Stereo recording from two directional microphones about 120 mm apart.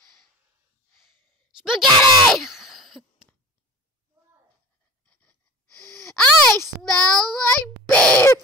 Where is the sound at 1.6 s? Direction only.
5° right (ahead or behind).